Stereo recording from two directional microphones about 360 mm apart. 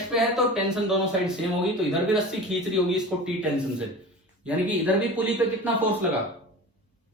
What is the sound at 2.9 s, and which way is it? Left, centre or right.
Speech, centre.